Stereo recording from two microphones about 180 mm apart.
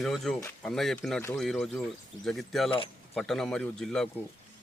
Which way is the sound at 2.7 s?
30° left (ahead or behind).